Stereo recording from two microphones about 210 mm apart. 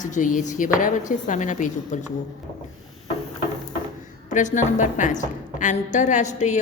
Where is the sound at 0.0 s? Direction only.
40° left (ahead or behind).